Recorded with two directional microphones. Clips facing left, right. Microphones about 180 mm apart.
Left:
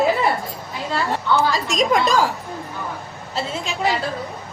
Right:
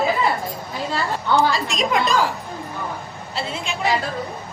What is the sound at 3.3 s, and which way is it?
Speech, 40° left (ahead or behind).